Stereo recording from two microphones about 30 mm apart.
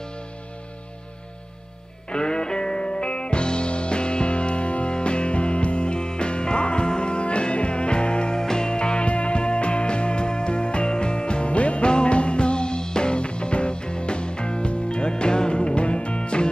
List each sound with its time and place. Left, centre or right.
2.0 s music: left
8.4 s music: left